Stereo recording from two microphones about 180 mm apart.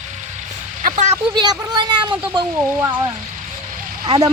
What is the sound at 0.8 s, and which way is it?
Speech, 45° right (ahead or behind).